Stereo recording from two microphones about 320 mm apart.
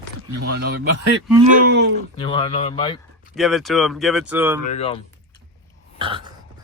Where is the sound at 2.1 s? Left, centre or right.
Centre.